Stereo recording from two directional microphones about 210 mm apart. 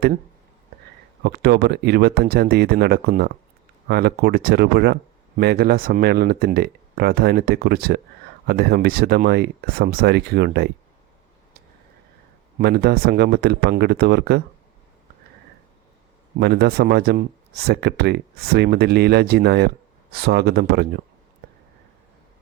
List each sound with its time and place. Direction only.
1.2 s speech: 50° right (ahead or behind)
12.5 s speech: 50° right (ahead or behind)
16.4 s speech: 50° right (ahead or behind)